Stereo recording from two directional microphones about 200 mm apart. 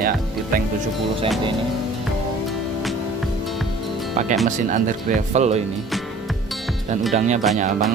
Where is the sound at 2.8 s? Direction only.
Centre (ahead or behind).